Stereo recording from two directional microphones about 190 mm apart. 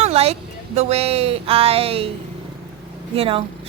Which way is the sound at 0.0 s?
35° right (ahead or behind).